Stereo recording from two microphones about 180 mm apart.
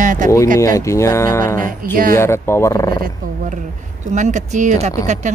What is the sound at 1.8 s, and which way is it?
Speech, 55° right (ahead or behind).